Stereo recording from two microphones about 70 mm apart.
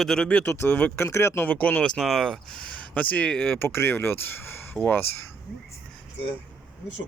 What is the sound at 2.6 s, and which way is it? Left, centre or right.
Speech, left.